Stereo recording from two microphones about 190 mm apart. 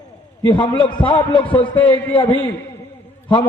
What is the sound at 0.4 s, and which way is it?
A man's voice, 25° left (ahead or behind).